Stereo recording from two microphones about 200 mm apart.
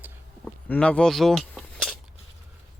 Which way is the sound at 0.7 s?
5° left (ahead or behind).